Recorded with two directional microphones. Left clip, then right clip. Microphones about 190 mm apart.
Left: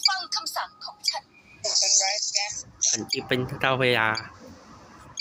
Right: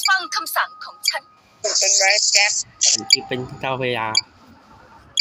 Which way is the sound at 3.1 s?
Centre (ahead or behind).